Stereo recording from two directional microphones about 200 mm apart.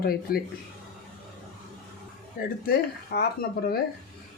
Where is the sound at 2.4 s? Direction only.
45° left (ahead or behind).